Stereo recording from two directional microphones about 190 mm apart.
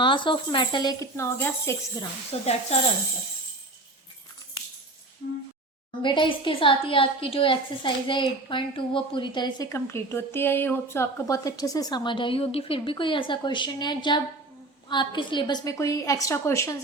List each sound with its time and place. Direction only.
0.0 s a woman's voice: 25° left (ahead or behind)
2.3 s speech: 30° left (ahead or behind)
6.0 s a woman's voice: 25° left (ahead or behind)